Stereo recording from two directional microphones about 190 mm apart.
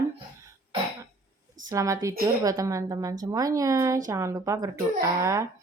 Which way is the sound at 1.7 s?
15° right (ahead or behind).